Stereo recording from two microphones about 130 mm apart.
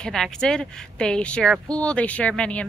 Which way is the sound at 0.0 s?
5° left (ahead or behind).